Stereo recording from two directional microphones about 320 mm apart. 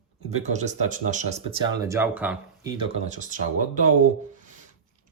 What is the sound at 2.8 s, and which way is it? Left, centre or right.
Speech, right.